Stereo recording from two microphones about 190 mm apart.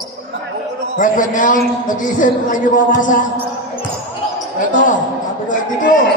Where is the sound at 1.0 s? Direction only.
45° left (ahead or behind).